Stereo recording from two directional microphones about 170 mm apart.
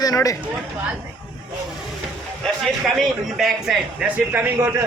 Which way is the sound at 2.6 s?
Centre (ahead or behind).